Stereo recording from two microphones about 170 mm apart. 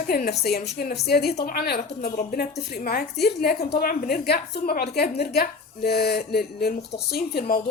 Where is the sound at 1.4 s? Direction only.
60° left (ahead or behind).